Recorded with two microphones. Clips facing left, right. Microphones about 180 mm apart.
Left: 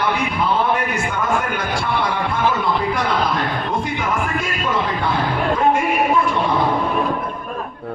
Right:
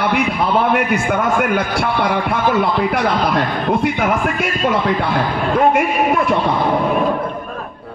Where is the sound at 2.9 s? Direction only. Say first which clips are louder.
Right 4 dB; 65° right (ahead or behind).